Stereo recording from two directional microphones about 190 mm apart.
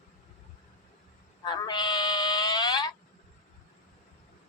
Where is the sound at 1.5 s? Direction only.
20° left (ahead or behind).